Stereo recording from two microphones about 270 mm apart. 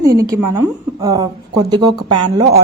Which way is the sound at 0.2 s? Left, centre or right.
Centre.